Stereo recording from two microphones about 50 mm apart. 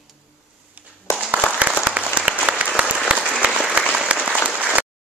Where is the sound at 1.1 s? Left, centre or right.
Left.